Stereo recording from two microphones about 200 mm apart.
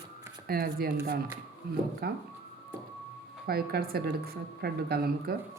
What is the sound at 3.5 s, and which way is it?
A woman's voice, 50° right (ahead or behind).